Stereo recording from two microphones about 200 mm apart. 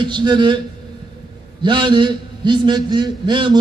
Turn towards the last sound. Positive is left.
turn(degrees=-20)  # may be behind; listen again after turning